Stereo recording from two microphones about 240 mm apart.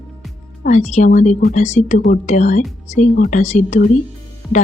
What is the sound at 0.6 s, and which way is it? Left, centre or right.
A woman's voice, left.